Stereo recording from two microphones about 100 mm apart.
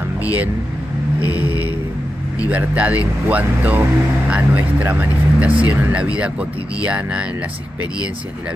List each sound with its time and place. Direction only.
0.2 s speech: 15° right (ahead or behind)